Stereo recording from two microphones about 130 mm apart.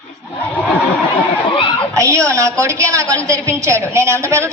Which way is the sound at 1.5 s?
40° left (ahead or behind).